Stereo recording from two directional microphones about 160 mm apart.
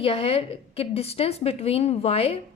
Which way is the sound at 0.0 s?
35° left (ahead or behind).